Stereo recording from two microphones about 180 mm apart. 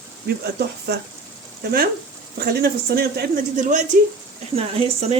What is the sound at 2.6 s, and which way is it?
Speech, 60° right (ahead or behind).